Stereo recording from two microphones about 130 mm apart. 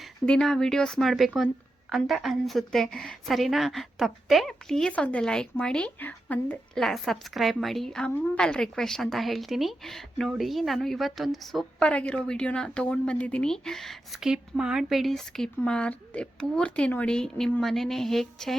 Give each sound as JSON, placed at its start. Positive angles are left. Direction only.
{"t": 0.0, "sound": "a woman's voice", "side_deg": 5}